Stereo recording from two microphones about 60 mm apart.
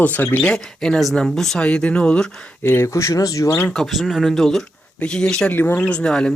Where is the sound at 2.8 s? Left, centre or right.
Left.